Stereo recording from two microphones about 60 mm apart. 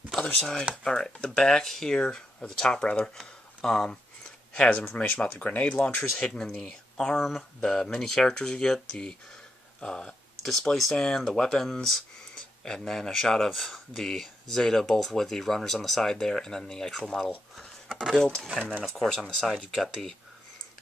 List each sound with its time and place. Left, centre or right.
0.1 s a sound: centre
0.4 s speech: centre
4.9 s speech: left
7.2 s speech: centre